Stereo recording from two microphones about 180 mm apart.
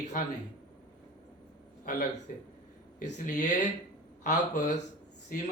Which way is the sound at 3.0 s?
45° left (ahead or behind).